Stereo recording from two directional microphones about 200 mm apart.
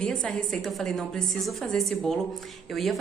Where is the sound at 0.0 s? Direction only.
5° left (ahead or behind).